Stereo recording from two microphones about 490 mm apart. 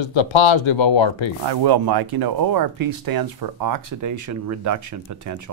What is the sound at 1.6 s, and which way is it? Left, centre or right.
Speech, right.